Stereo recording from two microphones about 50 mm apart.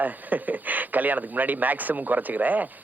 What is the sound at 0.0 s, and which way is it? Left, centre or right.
Speech, right.